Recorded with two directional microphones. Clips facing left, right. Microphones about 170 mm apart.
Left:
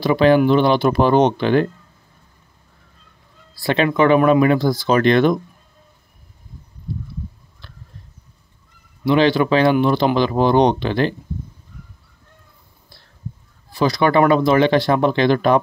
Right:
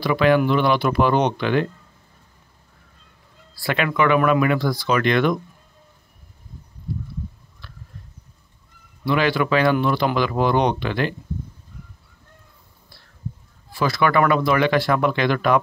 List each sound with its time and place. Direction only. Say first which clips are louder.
0.0 s speech: left 4 dB; 30° left (ahead or behind)
3.6 s speech: left 5 dB; 30° left (ahead or behind)
9.0 s speech: left 5 dB; 25° left (ahead or behind)
13.7 s speech: left 3 dB; 20° left (ahead or behind)